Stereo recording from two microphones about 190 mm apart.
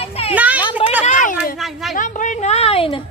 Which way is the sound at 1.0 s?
40° left (ahead or behind).